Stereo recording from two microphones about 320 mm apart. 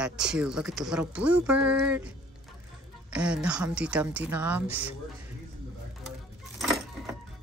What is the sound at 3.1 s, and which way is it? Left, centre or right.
Speech, centre.